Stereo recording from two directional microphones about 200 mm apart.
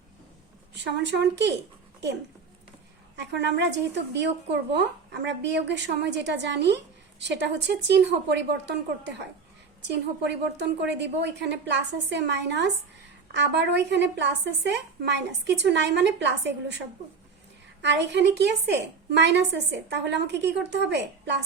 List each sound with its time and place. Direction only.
0.7 s a woman's voice: 60° right (ahead or behind)
3.2 s a woman's voice: 60° right (ahead or behind)
17.8 s a woman's voice: 60° right (ahead or behind)